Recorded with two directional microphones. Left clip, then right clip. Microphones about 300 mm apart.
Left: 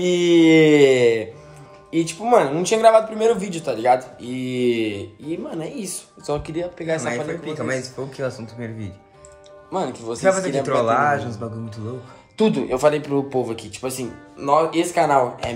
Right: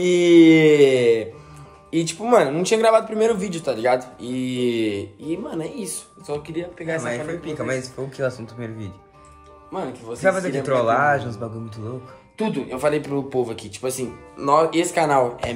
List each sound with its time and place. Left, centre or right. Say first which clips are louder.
0.0 s a sound: right 2 dB; centre
1.9 s speech: left 1 dB; centre
6.2 s speech: left 3 dB; left
7.0 s speech: left 1 dB; centre
12.4 s speech: left 6 dB; centre